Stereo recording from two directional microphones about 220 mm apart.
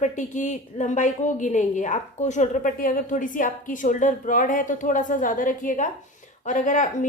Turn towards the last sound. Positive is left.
turn(degrees=35)  # may be behind; listen again after turning